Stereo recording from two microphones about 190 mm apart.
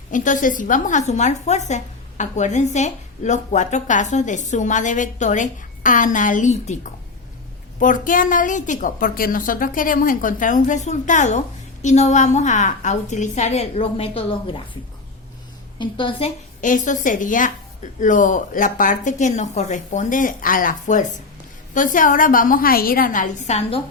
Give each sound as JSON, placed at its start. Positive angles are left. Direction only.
{"t": 0.1, "sound": "a woman's voice", "side_deg": 45}
{"t": 15.8, "sound": "a woman's voice", "side_deg": 25}